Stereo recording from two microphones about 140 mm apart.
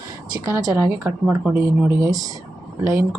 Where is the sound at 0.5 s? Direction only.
25° right (ahead or behind).